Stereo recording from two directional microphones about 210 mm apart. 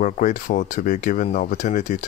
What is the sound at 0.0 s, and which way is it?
Speech, 35° left (ahead or behind).